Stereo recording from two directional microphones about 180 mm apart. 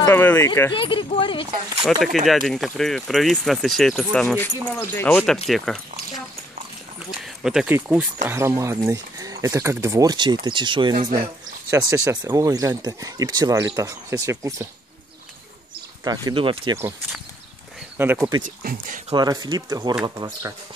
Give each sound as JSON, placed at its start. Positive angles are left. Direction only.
{"t": 0.0, "sound": "speech", "side_deg": 10}
{"t": 0.7, "sound": "speech", "side_deg": 30}
{"t": 1.8, "sound": "speech", "side_deg": 0}
{"t": 5.5, "sound": "a sound", "side_deg": 0}
{"t": 7.1, "sound": "speech", "side_deg": -5}
{"t": 16.0, "sound": "speech", "side_deg": -20}
{"t": 17.9, "sound": "speech", "side_deg": -10}
{"t": 18.4, "sound": "speech", "side_deg": -50}
{"t": 19.1, "sound": "speech", "side_deg": -20}